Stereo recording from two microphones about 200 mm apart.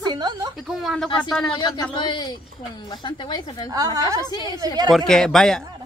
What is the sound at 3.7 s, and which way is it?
Speech, 20° right (ahead or behind).